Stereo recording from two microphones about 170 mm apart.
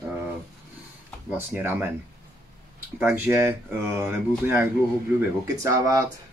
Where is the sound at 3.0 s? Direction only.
15° right (ahead or behind).